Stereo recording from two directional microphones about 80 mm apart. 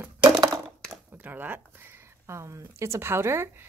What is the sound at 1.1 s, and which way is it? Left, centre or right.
Speech, right.